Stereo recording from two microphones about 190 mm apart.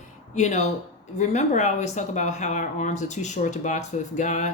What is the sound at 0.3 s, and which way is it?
Speech, 40° left (ahead or behind).